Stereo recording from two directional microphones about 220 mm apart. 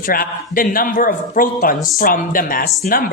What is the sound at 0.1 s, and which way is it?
A woman's voice, 40° left (ahead or behind).